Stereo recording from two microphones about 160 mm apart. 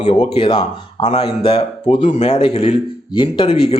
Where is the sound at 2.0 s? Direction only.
45° left (ahead or behind).